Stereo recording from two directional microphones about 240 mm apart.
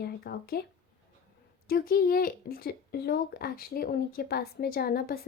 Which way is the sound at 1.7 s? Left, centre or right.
Left.